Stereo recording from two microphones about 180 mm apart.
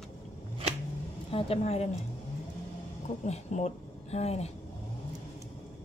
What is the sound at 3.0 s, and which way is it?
Speech, 40° left (ahead or behind).